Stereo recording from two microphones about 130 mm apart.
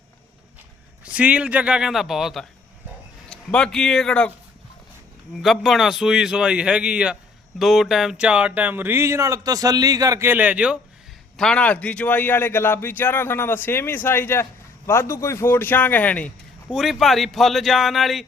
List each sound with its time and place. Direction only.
1.0 s speech: 10° right (ahead or behind); by 4.3 s 5° left (ahead or behind)
5.4 s a man's voice: centre (ahead or behind)
11.3 s a man's voice: 5° left (ahead or behind)
16.7 s a man's voice: centre (ahead or behind)